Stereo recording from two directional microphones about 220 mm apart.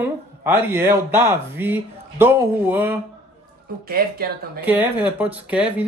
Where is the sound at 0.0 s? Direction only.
10° right (ahead or behind).